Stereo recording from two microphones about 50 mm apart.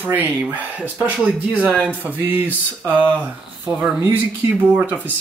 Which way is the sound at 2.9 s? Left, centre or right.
Left.